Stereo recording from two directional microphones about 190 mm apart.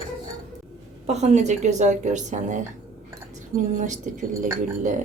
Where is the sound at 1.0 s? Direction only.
35° right (ahead or behind).